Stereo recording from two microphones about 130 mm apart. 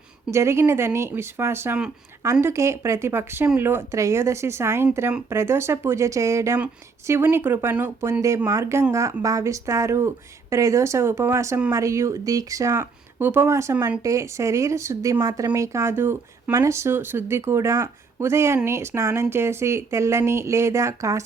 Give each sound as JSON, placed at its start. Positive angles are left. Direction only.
{"t": 0.3, "sound": "speech", "side_deg": -20}